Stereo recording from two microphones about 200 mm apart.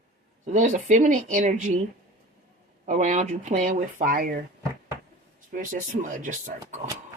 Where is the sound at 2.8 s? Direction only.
40° right (ahead or behind).